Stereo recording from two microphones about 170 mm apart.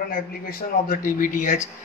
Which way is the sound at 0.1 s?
55° left (ahead or behind).